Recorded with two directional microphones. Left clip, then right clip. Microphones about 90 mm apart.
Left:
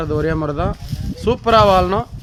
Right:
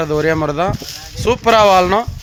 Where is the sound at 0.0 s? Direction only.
40° right (ahead or behind).